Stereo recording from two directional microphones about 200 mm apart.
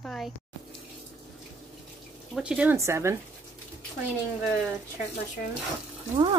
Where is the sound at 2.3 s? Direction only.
5° right (ahead or behind).